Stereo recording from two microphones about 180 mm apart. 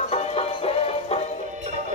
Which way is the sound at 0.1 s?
35° left (ahead or behind).